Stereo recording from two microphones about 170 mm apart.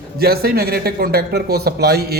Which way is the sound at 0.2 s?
65° right (ahead or behind).